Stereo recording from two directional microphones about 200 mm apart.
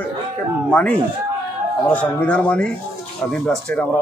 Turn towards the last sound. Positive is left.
turn(degrees=5)  # may be behind; listen again after turning